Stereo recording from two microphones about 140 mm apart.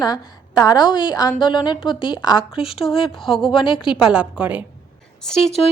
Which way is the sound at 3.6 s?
35° left (ahead or behind).